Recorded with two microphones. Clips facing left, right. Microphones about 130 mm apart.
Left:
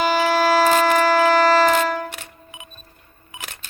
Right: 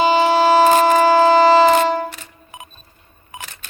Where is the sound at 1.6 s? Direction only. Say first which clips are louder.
Right 4 dB; 25° right (ahead or behind).